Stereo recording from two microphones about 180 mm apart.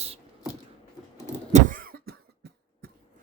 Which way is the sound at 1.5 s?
45° right (ahead or behind).